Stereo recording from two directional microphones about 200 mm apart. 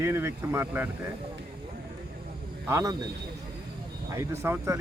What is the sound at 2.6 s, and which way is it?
Speech, 15° right (ahead or behind).